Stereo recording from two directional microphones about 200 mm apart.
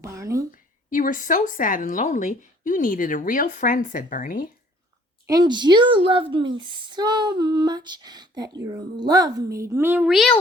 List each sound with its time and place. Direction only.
0.0 s a sound: 15° right (ahead or behind)
0.5 s a woman's voice: 40° left (ahead or behind)
5.3 s female singing: 20° right (ahead or behind)
8.6 s a woman's voice: 15° right (ahead or behind); by 10.4 s centre (ahead or behind)